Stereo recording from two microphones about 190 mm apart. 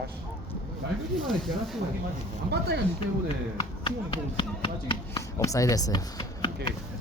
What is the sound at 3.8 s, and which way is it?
Speech, 25° left (ahead or behind).